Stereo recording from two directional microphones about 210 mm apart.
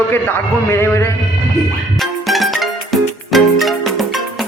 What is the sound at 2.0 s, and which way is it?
Music, centre (ahead or behind).